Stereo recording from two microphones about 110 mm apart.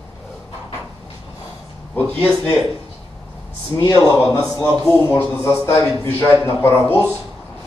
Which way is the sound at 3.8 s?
30° left (ahead or behind).